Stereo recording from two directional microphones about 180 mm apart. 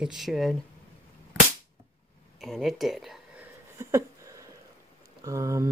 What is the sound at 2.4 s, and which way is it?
Speech, centre (ahead or behind).